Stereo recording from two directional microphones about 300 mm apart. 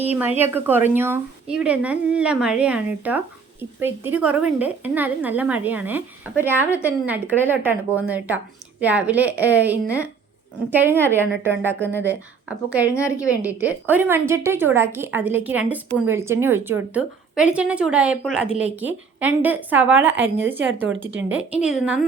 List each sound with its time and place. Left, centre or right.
0.3 s a woman's voice: centre
20.6 s speech: right
21.2 s speech: centre